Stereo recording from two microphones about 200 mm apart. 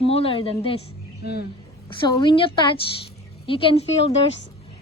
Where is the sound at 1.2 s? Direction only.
55° left (ahead or behind).